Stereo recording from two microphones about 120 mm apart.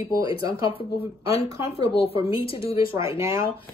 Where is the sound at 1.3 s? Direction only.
55° left (ahead or behind).